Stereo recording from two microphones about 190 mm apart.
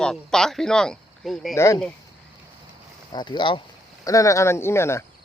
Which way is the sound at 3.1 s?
25° left (ahead or behind).